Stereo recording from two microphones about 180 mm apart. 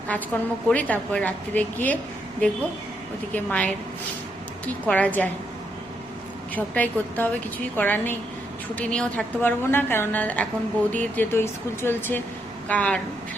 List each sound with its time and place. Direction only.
0.1 s a woman's voice: 10° left (ahead or behind)
3.3 s a woman's voice: 5° left (ahead or behind)
6.5 s a woman's voice: 10° left (ahead or behind)